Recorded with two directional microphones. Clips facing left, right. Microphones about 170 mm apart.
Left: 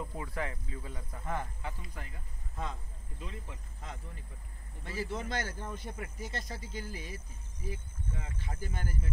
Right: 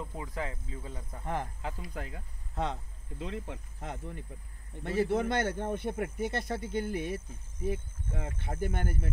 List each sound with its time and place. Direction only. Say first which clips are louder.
0.1 s speech: even; 20° right (ahead or behind)
1.8 s speech: right 7 dB; 90° right; by 9.1 s 60° right (ahead or behind)